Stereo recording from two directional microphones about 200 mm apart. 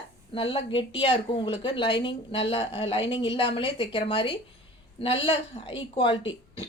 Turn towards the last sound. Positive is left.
turn(degrees=25)  # may be behind; listen again after turning